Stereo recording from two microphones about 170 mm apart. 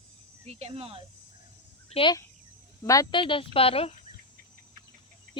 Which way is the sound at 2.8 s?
20° left (ahead or behind).